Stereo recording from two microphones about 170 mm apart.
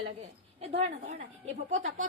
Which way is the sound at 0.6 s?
40° right (ahead or behind).